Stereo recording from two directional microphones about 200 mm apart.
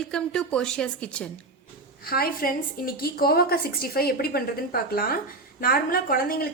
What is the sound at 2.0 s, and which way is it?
A woman's voice, 50° left (ahead or behind).